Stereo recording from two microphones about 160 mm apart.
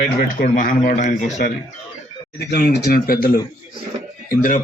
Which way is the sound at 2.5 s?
80° left.